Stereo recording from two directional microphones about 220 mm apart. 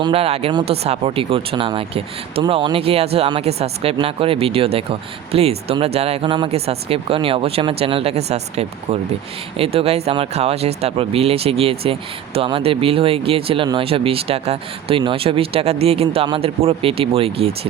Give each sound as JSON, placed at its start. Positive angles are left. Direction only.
{"t": 0.0, "sound": "speech", "side_deg": -25}